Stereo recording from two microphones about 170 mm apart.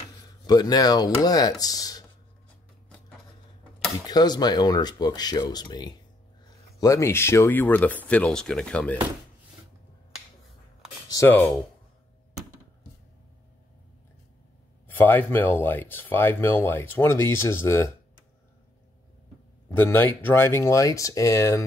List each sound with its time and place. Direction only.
0.5 s speech: 25° left (ahead or behind)
4.1 s speech: 25° left (ahead or behind); by 8.9 s 5° left (ahead or behind)
11.1 s speech: 15° left (ahead or behind)
14.9 s speech: 10° left (ahead or behind)
19.7 s speech: 10° left (ahead or behind)